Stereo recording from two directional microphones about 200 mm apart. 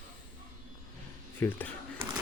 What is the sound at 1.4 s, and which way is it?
Speech, 10° left (ahead or behind).